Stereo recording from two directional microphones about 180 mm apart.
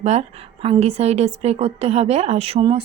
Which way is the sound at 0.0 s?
35° right (ahead or behind).